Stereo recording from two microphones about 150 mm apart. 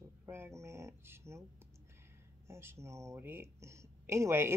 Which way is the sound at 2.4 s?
15° right (ahead or behind).